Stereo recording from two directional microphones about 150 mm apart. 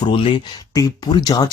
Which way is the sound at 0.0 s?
35° left (ahead or behind).